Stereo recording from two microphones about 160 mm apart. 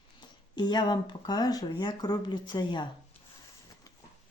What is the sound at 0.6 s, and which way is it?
Speech, 25° left (ahead or behind).